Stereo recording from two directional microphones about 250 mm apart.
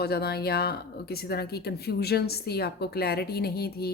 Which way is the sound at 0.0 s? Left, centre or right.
Left.